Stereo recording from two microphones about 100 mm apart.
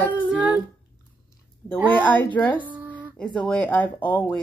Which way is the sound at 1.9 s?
15° left (ahead or behind).